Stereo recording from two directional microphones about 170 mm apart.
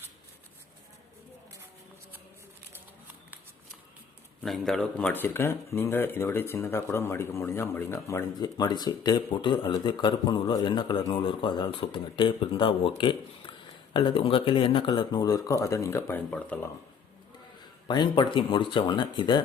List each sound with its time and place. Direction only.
4.4 s speech: centre (ahead or behind); by 12.9 s 30° left (ahead or behind)
13.9 s speech: 30° left (ahead or behind); by 16.6 s 10° left (ahead or behind)
17.8 s speech: 25° left (ahead or behind)